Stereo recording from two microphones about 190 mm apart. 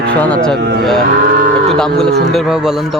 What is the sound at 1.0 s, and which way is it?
Cattle, 45° right (ahead or behind).